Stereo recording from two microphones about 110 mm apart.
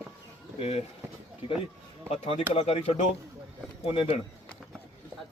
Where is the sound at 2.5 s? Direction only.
65° left (ahead or behind).